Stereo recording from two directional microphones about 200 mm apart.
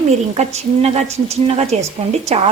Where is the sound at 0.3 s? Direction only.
30° right (ahead or behind).